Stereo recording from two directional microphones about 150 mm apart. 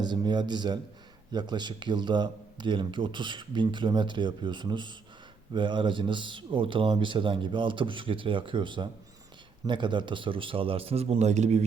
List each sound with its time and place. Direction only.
0.0 s speech: 30° right (ahead or behind); by 11.6 s 50° right (ahead or behind)